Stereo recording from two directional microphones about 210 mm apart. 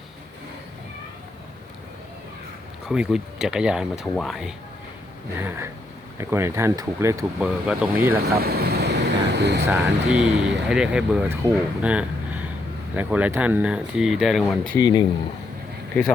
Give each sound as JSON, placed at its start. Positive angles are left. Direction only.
{"t": 2.9, "sound": "speech", "side_deg": -5}
{"t": 8.4, "sound": "vehicle", "side_deg": -50}
{"t": 9.6, "sound": "speech", "side_deg": -5}
{"t": 14.8, "sound": "speech", "side_deg": 20}